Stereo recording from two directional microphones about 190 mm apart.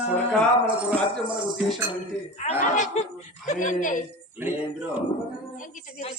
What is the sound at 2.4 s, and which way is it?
A woman's voice, 40° left (ahead or behind).